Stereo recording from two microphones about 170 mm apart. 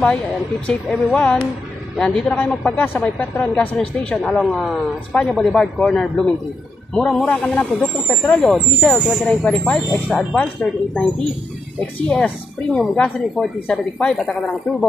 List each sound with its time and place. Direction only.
0.7 s a man's voice: 5° left (ahead or behind)